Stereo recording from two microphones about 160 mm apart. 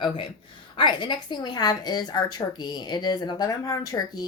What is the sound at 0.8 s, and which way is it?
Speech, 30° left (ahead or behind).